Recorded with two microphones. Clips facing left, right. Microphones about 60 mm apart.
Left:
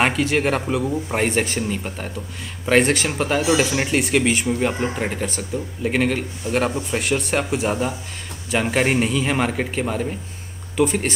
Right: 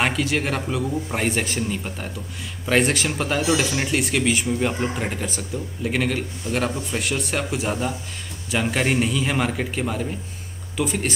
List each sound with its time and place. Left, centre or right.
0.0 s speech: centre
5.5 s speech: left
5.9 s speech: centre